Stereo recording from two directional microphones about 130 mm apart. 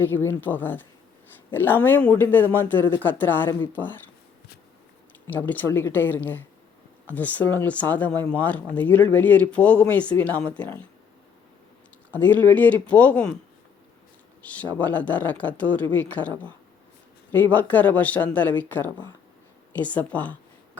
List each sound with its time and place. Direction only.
0.0 s speech: 15° left (ahead or behind)
5.3 s speech: 15° left (ahead or behind)
12.1 s speech: 15° left (ahead or behind)
14.4 s speech: 10° left (ahead or behind)